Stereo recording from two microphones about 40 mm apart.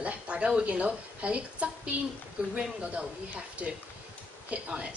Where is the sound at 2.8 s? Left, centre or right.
Right.